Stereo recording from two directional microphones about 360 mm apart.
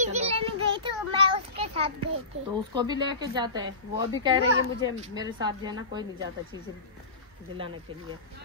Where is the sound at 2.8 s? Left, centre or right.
Centre.